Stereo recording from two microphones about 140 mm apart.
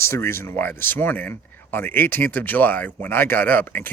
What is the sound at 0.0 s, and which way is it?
Speech, 20° left (ahead or behind).